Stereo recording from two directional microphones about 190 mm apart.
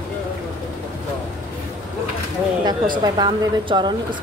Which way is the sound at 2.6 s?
20° right (ahead or behind).